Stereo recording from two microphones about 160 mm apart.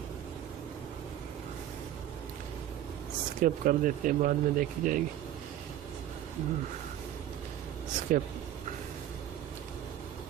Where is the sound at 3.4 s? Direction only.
55° right (ahead or behind).